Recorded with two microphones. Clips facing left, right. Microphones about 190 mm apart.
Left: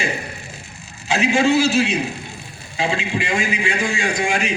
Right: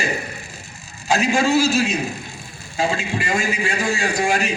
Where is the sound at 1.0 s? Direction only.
45° right (ahead or behind).